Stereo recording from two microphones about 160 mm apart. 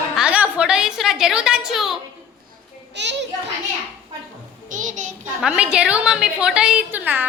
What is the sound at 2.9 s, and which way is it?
Children playing, 90° right.